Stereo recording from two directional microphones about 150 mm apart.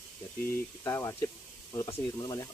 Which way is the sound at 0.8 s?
20° left (ahead or behind).